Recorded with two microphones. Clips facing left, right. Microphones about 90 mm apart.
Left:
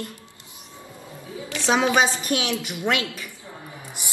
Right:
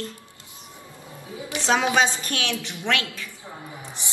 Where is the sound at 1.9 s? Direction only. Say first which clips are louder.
Left 1 dB; 15° left (ahead or behind).